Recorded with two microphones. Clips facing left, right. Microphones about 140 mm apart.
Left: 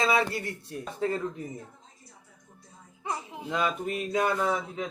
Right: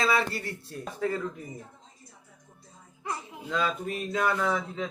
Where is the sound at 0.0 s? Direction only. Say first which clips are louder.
Left 1 dB; 15° left (ahead or behind).